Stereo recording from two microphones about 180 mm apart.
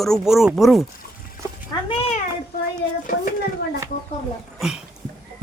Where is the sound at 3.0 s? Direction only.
50° left (ahead or behind).